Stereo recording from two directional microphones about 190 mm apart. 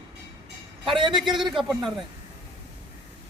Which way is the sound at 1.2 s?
Centre (ahead or behind).